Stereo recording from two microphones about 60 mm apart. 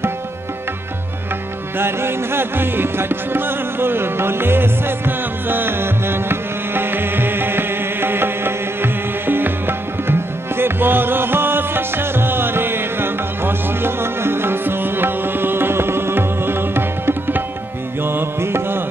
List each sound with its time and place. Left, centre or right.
1.8 s music: right